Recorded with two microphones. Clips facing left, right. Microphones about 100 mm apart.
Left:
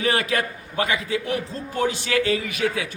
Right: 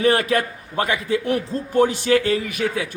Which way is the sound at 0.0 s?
50° right (ahead or behind).